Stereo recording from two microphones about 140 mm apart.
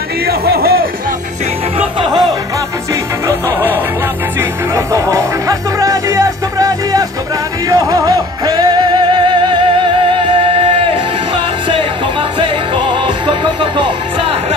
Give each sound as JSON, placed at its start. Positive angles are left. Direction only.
{"t": 0.3, "sound": "music", "side_deg": -90}
{"t": 1.8, "sound": "music", "side_deg": -35}
{"t": 3.3, "sound": "music", "side_deg": -15}
{"t": 12.4, "sound": "music", "side_deg": -40}